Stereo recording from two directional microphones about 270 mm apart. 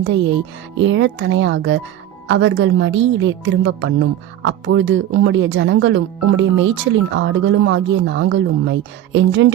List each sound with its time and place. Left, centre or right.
0.8 s a woman's voice: right